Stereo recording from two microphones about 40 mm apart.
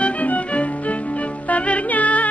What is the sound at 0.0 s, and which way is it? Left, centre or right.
Music, left.